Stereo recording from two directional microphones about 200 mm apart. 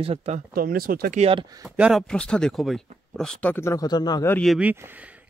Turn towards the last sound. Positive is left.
turn(degrees=-10)  # may be behind; listen again after turning